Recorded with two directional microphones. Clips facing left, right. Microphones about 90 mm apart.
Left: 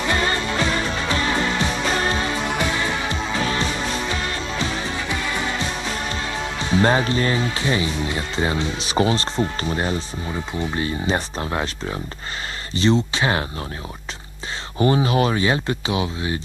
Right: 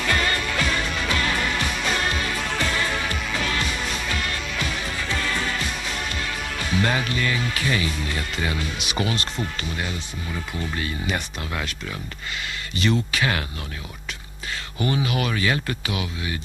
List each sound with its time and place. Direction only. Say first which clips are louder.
0.0 s music: left 2 dB; 25° left (ahead or behind)
5.0 s music: right 1 dB; 20° left (ahead or behind)
6.4 s speech: left 6 dB; 30° left (ahead or behind)
14.8 s speech: left 6 dB; 35° left (ahead or behind)